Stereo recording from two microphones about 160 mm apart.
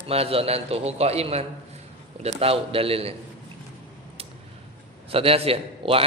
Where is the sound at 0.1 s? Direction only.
35° right (ahead or behind).